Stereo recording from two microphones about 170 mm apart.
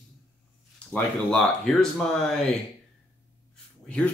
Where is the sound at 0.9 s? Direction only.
5° left (ahead or behind).